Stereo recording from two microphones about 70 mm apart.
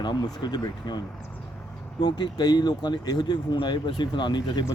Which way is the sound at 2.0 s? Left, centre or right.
Left.